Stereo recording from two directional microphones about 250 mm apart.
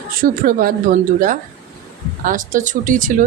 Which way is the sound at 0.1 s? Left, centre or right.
Right.